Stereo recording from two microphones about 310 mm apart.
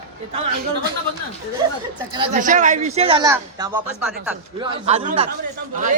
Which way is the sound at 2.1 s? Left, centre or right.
Right.